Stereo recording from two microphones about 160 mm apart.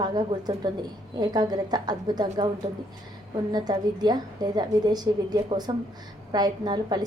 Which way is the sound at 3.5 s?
25° right (ahead or behind).